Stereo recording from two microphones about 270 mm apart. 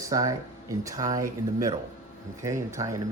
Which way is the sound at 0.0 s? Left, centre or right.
Centre.